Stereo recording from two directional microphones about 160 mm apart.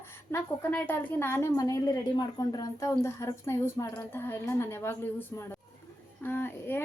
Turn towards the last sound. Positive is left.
turn(degrees=15)  # may be behind; listen again after turning